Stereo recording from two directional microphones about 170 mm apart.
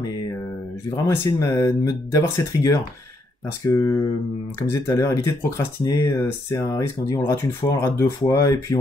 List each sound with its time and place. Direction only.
0.8 s speech: 20° left (ahead or behind)